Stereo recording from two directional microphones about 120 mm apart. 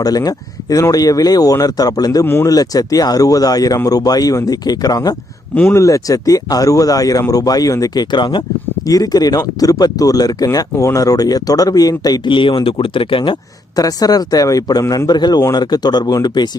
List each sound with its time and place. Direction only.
0.0 s speech: 30° left (ahead or behind)
2.2 s speech: 20° left (ahead or behind)
2.5 s speech: 30° left (ahead or behind); by 13.3 s 45° left (ahead or behind)
13.7 s speech: 30° left (ahead or behind)